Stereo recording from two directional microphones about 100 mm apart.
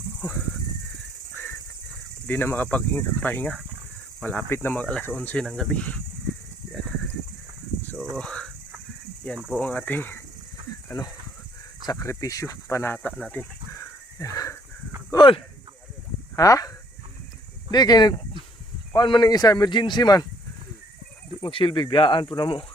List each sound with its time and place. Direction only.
2.2 s cricket: 20° left (ahead or behind)
8.1 s cricket: 10° left (ahead or behind)
9.6 s cricket: 15° left (ahead or behind)
11.9 s speech: 35° left (ahead or behind)
12.6 s cricket: 20° left (ahead or behind)
13.0 s cricket: 5° left (ahead or behind)
14.2 s wheeze: 35° left (ahead or behind)
15.1 s a sound: 35° left (ahead or behind)
16.3 s speech: 35° left (ahead or behind)
21.4 s speech: 55° left (ahead or behind)